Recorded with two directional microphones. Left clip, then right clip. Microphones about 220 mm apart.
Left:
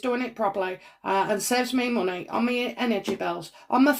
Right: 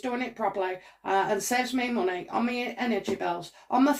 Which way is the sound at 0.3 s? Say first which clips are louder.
Left 2 dB; 25° left (ahead or behind).